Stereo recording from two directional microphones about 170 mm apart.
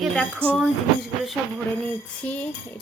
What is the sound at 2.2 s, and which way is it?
Music, 10° left (ahead or behind).